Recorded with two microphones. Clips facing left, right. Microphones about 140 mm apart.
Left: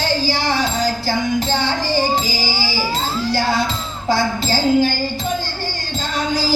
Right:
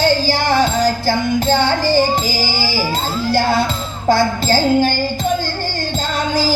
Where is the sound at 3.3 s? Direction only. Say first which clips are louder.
Right 4 dB; 50° right (ahead or behind).